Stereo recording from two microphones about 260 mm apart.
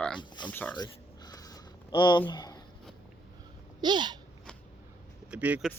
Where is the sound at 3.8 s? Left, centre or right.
Centre.